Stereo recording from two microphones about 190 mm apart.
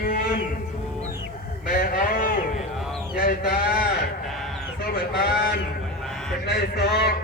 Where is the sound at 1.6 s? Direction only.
50° left (ahead or behind).